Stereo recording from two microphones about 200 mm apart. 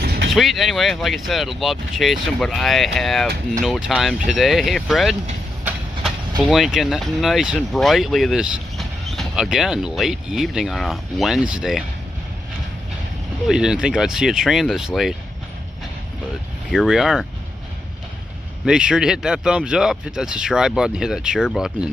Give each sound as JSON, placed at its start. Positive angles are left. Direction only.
{"t": 0.0, "sound": "vehicle", "side_deg": -50}
{"t": 0.3, "sound": "speech", "side_deg": 0}
{"t": 6.4, "sound": "speech", "side_deg": 0}
{"t": 13.5, "sound": "speech", "side_deg": -5}
{"t": 16.7, "sound": "speech", "side_deg": 0}
{"t": 18.7, "sound": "speech", "side_deg": -5}